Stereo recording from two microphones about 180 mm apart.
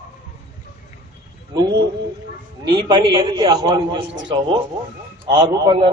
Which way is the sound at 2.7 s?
25° right (ahead or behind).